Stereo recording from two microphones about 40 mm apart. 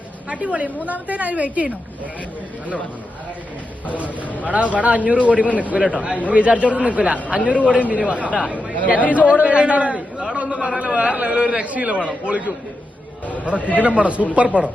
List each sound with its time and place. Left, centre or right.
0.3 s a man's voice: right
4.4 s a man's voice: right
6.2 s a man's voice: right
13.4 s a man's voice: right